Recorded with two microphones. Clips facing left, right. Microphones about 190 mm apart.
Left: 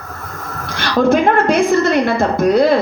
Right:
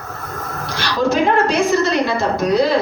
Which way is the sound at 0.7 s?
55° left (ahead or behind).